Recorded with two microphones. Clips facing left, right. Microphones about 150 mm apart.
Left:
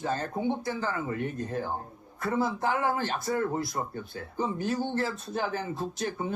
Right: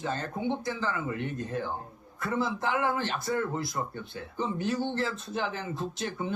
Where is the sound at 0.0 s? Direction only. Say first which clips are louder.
Left 2 dB; 45° left (ahead or behind).